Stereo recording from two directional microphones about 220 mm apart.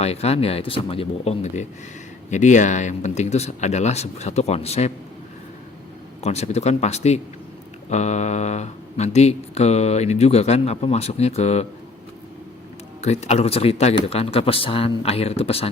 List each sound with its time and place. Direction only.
0.0 s speech: 30° left (ahead or behind)
6.2 s speech: 30° left (ahead or behind)
13.0 s speech: 30° left (ahead or behind)